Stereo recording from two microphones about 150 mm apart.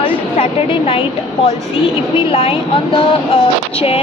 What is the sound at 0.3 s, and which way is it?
Speech, 40° left (ahead or behind).